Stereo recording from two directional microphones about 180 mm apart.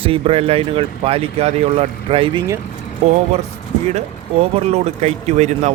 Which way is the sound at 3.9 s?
35° right (ahead or behind).